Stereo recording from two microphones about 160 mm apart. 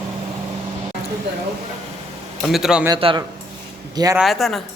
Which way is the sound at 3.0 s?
30° right (ahead or behind).